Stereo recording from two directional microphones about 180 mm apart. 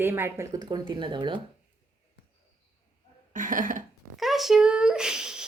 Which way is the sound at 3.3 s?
45° right (ahead or behind).